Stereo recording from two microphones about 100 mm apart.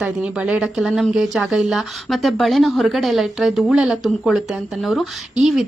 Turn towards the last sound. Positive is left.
turn(degrees=0)  # may be behind; listen again after turning